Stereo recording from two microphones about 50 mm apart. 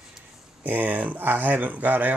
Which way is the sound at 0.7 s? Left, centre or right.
Right.